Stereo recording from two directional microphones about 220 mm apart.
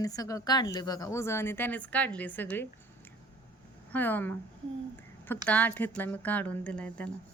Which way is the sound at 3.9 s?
10° left (ahead or behind).